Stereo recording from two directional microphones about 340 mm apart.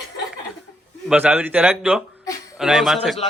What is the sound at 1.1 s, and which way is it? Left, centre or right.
Speech, centre.